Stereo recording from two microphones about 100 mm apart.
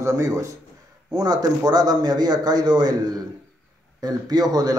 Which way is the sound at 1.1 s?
40° right (ahead or behind).